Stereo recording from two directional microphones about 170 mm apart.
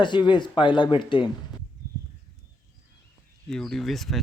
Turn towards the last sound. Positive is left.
turn(degrees=0)  # may be behind; listen again after turning